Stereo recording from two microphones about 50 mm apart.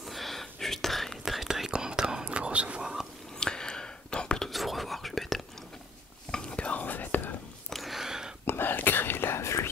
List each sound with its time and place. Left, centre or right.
0.0 s whispering: centre
1.2 s whispering: centre
1.7 s whispering: centre
2.8 s whispering: centre
3.3 s whispering: centre
4.5 s whispering: centre
6.3 s whispering: left
7.7 s a sound: centre
8.5 s whispering: left
9.4 s whispering: left